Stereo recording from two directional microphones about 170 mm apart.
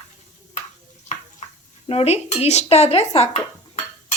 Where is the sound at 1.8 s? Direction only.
35° left (ahead or behind).